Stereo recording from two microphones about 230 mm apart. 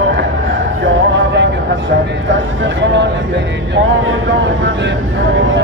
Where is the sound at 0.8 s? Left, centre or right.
Right.